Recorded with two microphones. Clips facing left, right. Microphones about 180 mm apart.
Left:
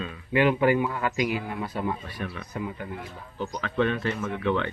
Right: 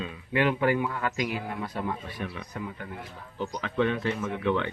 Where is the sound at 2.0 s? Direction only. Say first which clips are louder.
Left 1 dB; 20° right (ahead or behind).